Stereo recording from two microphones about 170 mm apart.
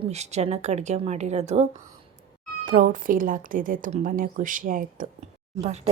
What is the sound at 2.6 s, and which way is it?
A woman's voice, 50° right (ahead or behind).